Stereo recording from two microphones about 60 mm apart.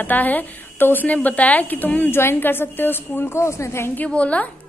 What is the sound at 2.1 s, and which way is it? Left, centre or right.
A woman's voice, left.